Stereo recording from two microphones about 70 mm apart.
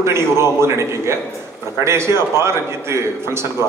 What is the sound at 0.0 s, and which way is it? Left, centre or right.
A man's voice, right.